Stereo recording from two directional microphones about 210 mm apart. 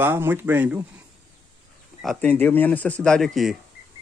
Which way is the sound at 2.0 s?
5° left (ahead or behind).